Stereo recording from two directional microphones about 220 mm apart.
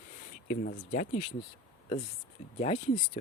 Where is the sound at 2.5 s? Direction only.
30° left (ahead or behind).